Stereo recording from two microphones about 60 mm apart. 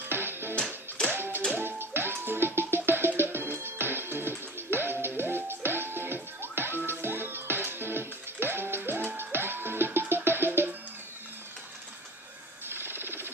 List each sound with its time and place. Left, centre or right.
0.1 s music: right
12.6 s jackhammer: right